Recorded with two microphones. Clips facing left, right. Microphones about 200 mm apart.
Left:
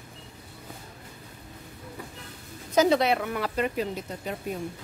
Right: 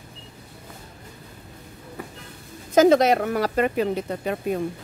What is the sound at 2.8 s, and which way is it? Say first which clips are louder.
Speech: right 6 dB; 45° right (ahead or behind).